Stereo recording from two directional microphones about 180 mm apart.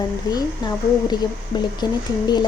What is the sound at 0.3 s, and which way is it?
A woman's voice, 25° left (ahead or behind).